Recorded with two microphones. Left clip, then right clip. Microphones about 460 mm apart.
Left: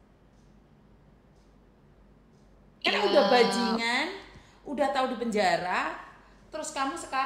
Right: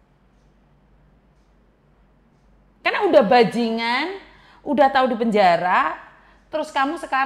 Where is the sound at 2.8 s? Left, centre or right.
Right.